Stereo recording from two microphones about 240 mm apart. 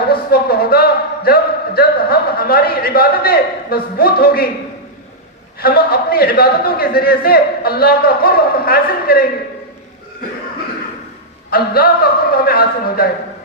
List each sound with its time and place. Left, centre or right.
0.1 s speech: left
5.5 s a man's voice: left
11.5 s a man's voice: left